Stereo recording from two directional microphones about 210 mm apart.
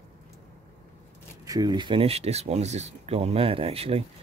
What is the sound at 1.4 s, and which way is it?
Speech, 15° right (ahead or behind).